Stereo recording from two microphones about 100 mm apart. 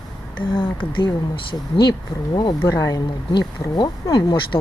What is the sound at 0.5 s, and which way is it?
Speech, 60° left (ahead or behind).